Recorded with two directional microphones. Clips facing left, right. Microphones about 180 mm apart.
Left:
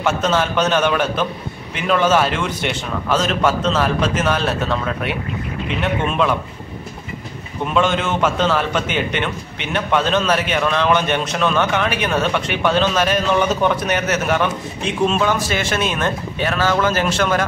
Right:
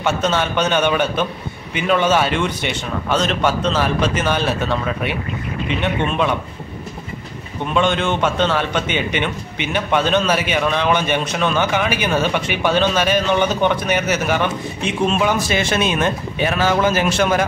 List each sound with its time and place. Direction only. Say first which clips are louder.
0.0 s a man's voice: left 1 dB; centre (ahead or behind)
7.6 s a man's voice: even; 5° left (ahead or behind)
15.2 s speech: right 1 dB; 15° right (ahead or behind)